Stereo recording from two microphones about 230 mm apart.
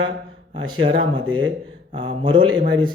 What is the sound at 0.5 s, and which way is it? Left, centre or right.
Speech, right.